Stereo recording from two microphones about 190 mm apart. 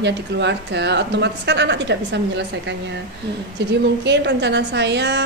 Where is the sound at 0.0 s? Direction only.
65° right (ahead or behind).